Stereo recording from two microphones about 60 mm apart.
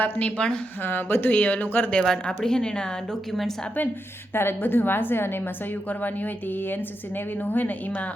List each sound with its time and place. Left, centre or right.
0.0 s a woman's voice: left
0.9 s speech: left
2.0 s a woman's voice: centre
4.4 s speech: left